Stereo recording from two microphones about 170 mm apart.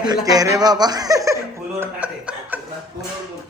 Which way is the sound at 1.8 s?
10° right (ahead or behind).